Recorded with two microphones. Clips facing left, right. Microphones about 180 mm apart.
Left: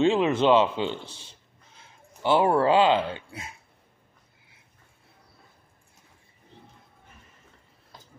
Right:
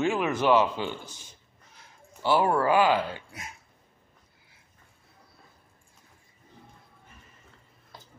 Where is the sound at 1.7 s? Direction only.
20° left (ahead or behind).